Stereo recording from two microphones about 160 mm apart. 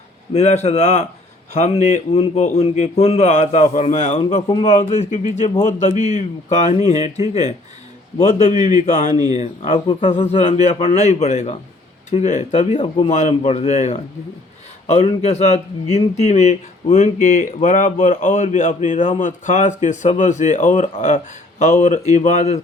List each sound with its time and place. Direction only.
0.3 s speech: 45° left (ahead or behind)
4.4 s a man's voice: 30° left (ahead or behind)
4.7 s speech: 45° left (ahead or behind)
8.2 s speech: 45° left (ahead or behind)
9.1 s speech: 25° right (ahead or behind)
9.4 s speech: 45° left (ahead or behind)